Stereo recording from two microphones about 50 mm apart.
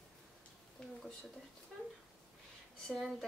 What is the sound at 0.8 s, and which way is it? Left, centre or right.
Speech, centre.